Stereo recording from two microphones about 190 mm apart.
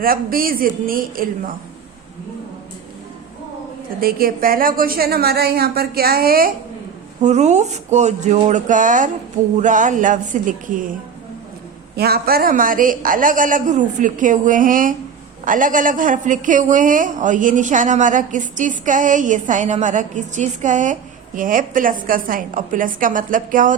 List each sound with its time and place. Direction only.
0.0 s a man's voice: 50° right (ahead or behind)
4.0 s a man's voice: 50° right (ahead or behind)
7.2 s a woman's voice: 35° right (ahead or behind)
11.9 s a man's voice: 55° right (ahead or behind)